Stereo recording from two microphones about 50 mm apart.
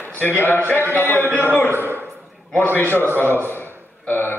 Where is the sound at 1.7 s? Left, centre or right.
Right.